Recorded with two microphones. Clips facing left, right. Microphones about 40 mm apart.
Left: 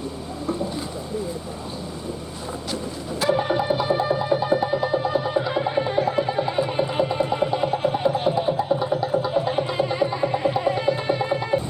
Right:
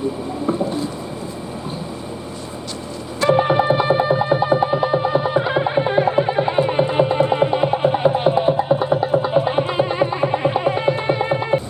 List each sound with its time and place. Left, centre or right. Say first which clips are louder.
3.3 s music: right 6 dB; right